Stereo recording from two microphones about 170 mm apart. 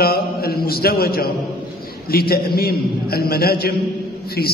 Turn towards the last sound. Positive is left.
turn(degrees=70)  # may be behind; listen again after turning